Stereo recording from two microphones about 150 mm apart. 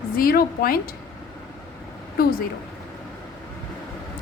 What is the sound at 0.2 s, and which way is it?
Speech, 80° left.